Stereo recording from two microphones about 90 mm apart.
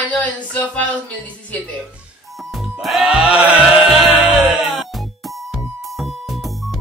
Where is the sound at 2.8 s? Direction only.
5° right (ahead or behind).